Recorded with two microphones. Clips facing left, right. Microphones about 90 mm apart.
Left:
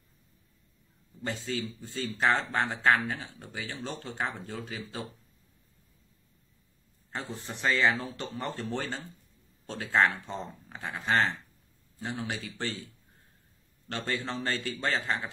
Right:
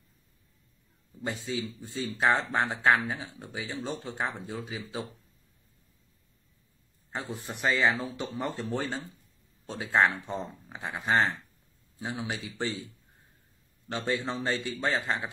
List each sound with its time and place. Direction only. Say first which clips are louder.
1.2 s a man's voice: right 1 dB; 15° right (ahead or behind)
7.2 s a man's voice: right 2 dB; 15° right (ahead or behind)